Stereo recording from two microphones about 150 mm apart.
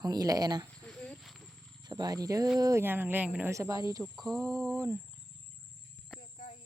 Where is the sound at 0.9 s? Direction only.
Centre (ahead or behind).